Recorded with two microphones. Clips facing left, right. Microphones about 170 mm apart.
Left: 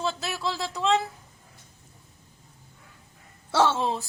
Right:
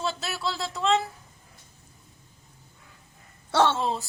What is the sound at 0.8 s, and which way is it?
Speech, centre (ahead or behind).